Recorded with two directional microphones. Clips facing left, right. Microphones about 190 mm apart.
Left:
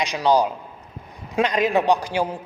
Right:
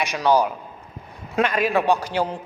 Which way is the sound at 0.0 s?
15° left (ahead or behind).